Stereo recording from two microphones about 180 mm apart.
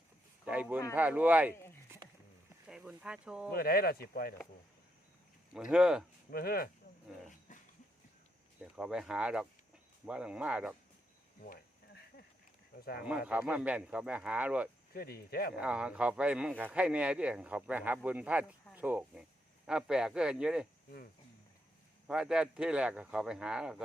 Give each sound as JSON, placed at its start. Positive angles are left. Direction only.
{"t": 0.4, "sound": "a man's voice", "side_deg": -10}
{"t": 2.6, "sound": "speech", "side_deg": -5}
{"t": 3.5, "sound": "speech", "side_deg": 60}
{"t": 5.5, "sound": "speech", "side_deg": -5}
{"t": 6.3, "sound": "speech", "side_deg": 55}
{"t": 8.7, "sound": "speech", "side_deg": -5}
{"t": 11.4, "sound": "insect", "side_deg": 55}
{"t": 13.0, "sound": "a man's voice", "side_deg": -5}
{"t": 14.9, "sound": "speech", "side_deg": 55}
{"t": 15.5, "sound": "a man's voice", "side_deg": -5}
{"t": 22.0, "sound": "speech", "side_deg": -5}